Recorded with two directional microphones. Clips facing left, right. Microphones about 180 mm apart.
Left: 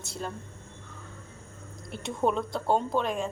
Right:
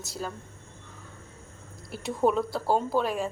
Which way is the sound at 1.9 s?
5° right (ahead or behind).